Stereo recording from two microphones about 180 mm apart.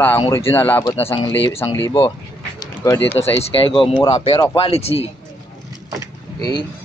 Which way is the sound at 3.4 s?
30° left (ahead or behind).